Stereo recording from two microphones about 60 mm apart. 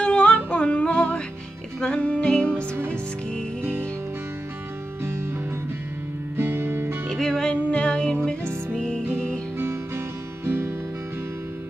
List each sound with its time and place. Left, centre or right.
0.0 s humming: centre
1.8 s music: centre
5.0 s music: right
6.3 s music: right
7.1 s music: centre
9.6 s music: right